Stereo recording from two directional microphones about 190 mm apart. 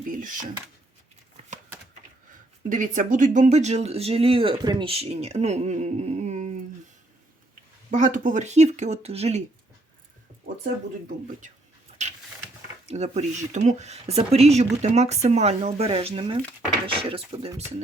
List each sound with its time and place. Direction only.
0.1 s speech: 45° right (ahead or behind)
2.6 s speech: 45° right (ahead or behind)
7.9 s speech: 40° right (ahead or behind)
11.9 s a sound: 35° right (ahead or behind)
12.8 s speech: 35° right (ahead or behind)